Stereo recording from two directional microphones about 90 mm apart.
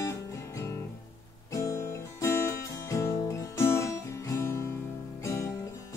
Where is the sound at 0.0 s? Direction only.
35° left (ahead or behind).